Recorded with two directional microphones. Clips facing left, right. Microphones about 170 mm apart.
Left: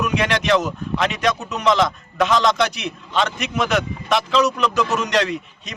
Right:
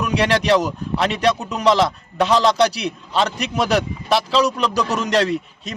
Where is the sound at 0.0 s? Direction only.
35° right (ahead or behind).